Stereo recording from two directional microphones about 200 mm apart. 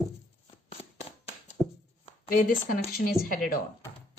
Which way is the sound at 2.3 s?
45° left (ahead or behind).